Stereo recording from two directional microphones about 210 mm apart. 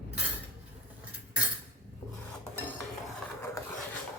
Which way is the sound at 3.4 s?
15° left (ahead or behind).